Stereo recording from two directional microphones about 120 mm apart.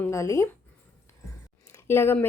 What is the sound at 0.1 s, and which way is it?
Speech, 25° left (ahead or behind).